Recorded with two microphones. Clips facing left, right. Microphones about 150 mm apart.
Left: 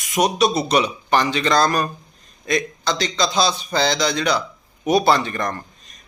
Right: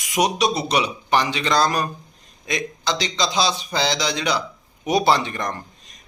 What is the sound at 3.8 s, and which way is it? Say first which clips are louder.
Speech: left 3 dB; 50° left (ahead or behind).